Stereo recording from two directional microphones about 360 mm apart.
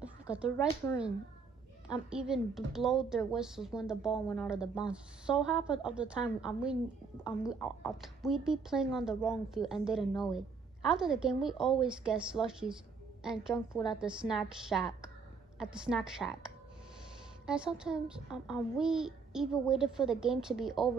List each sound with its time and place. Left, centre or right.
0.0 s a sound: centre
2.0 s a woman's voice: centre
17.5 s a woman's voice: centre